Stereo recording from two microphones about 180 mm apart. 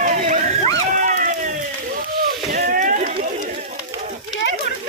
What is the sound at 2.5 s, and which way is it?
Rowboat, 50° right (ahead or behind).